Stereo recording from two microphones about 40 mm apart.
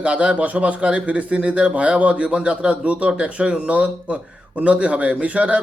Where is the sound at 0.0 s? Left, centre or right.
Right.